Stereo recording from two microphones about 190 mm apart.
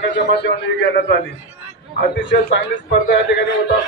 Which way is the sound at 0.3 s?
65° left (ahead or behind).